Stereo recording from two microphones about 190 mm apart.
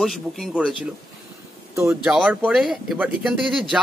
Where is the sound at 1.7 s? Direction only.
15° right (ahead or behind).